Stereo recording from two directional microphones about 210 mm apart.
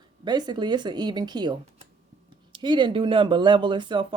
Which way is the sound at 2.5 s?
20° right (ahead or behind).